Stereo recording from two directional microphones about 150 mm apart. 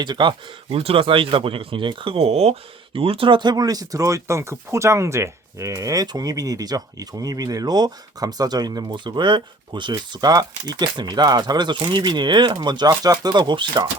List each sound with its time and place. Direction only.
0.0 s speech: 30° right (ahead or behind)